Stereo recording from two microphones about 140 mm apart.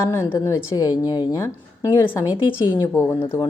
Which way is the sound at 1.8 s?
15° left (ahead or behind).